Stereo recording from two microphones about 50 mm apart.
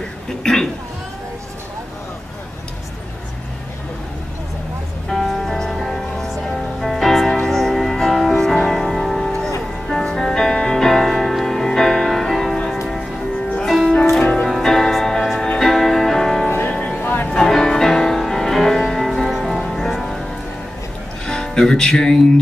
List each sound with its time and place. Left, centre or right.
0.4 s cough: centre
5.1 s music: centre
13.7 s music: centre
16.4 s music: left
17.4 s music: centre
21.3 s music: centre